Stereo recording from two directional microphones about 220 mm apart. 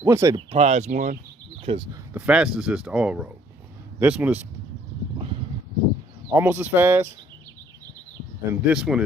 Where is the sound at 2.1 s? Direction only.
5° right (ahead or behind).